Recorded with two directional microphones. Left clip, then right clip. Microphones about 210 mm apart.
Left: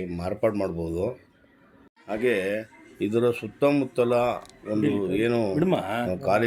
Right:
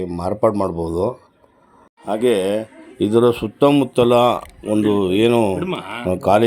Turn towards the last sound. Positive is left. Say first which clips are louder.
# right 8 dB
turn(degrees=-30)  # may be behind; listen again after turning